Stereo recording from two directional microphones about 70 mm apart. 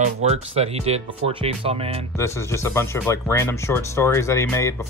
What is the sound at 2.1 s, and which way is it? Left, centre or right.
Speech, left.